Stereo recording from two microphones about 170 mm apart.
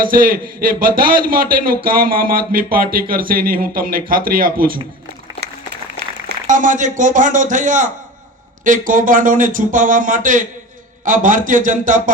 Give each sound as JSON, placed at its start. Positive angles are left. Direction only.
{"t": 0.0, "sound": "a man's voice", "side_deg": -55}
{"t": 6.2, "sound": "a man's voice", "side_deg": -50}